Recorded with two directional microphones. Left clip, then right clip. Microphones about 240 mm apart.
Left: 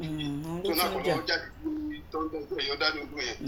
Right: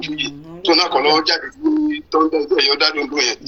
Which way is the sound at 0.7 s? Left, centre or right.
Right.